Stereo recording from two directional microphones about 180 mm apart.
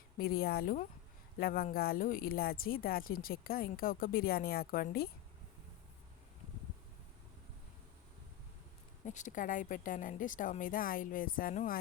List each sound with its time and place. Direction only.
0.2 s a woman's voice: 60° left (ahead or behind)
9.0 s a woman's voice: 45° left (ahead or behind)